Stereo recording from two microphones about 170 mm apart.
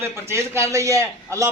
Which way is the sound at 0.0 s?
15° right (ahead or behind).